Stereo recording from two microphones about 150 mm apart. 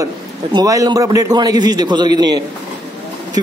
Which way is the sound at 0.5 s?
25° right (ahead or behind).